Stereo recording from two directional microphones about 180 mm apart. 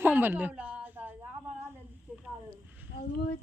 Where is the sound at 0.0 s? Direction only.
10° right (ahead or behind).